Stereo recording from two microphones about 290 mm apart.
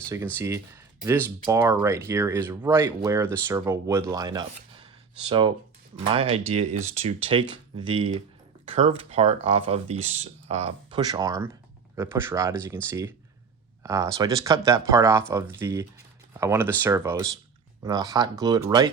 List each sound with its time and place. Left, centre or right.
0.3 s speech: centre
6.1 s speech: centre